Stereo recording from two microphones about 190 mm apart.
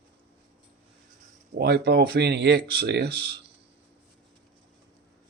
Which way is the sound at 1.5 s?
60° right (ahead or behind).